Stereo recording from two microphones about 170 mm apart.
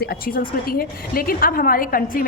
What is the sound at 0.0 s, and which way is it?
A woman's voice, 60° left (ahead or behind).